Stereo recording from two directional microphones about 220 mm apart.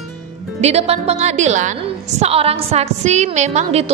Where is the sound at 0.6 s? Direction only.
30° right (ahead or behind).